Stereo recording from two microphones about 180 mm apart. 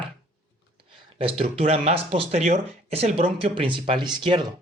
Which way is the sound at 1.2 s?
35° right (ahead or behind).